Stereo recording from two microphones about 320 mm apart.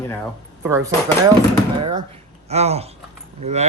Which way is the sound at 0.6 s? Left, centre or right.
Centre.